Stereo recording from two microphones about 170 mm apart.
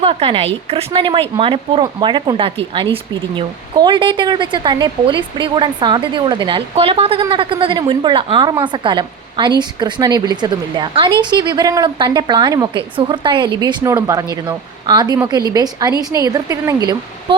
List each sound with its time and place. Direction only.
0.0 s a woman's voice: 35° right (ahead or behind)